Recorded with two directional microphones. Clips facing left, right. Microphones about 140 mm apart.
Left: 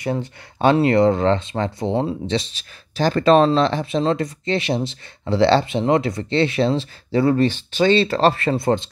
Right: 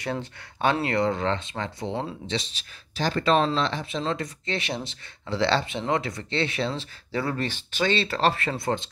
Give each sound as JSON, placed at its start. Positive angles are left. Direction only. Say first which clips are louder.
{"t": 0.7, "sound": "speech", "louder": "left 9 dB", "side_deg": 30}